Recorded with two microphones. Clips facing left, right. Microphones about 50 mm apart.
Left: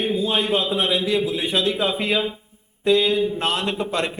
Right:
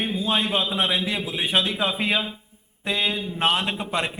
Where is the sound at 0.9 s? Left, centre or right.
Right.